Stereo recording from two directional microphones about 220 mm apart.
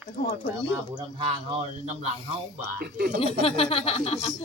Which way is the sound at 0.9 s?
20° right (ahead or behind).